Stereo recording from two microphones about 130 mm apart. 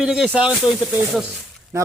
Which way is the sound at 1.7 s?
20° right (ahead or behind).